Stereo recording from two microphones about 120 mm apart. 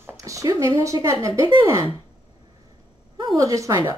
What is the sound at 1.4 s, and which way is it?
Speech, 35° right (ahead or behind).